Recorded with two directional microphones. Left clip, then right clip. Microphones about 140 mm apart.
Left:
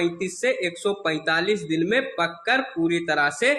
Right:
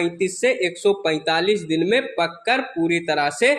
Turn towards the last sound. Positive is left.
turn(degrees=-35)  # may be behind; listen again after turning